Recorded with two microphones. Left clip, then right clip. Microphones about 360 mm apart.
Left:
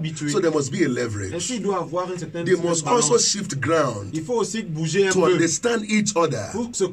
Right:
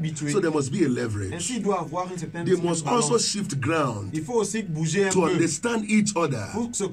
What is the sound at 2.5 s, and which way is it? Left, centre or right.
A man's voice, centre.